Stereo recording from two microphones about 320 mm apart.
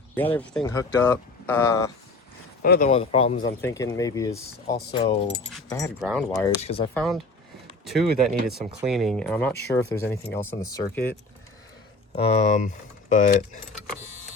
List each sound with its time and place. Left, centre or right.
0.2 s speech: centre
2.6 s speech: left; by 5.9 s centre
6.0 s speech: centre
6.4 s speech: centre
6.9 s speech: centre
12.1 s speech: centre